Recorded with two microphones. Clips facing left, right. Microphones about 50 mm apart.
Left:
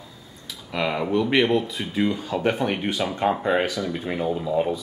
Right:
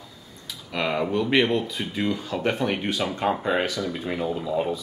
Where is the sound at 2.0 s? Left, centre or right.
Centre.